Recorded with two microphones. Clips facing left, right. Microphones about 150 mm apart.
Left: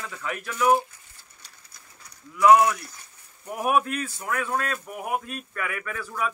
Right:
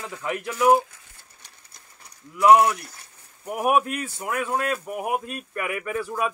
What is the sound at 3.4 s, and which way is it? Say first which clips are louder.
Speech: right 2 dB; 10° right (ahead or behind).